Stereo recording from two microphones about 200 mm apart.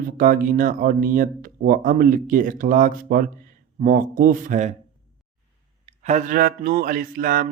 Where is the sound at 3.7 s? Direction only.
40° right (ahead or behind).